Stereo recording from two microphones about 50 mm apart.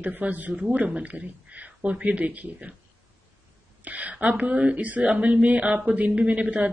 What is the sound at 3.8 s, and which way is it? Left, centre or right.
Speech, right.